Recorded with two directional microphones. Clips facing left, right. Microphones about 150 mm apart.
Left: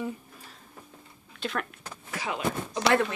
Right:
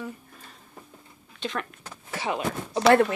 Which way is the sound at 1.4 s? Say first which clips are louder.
Right 1 dB; centre (ahead or behind).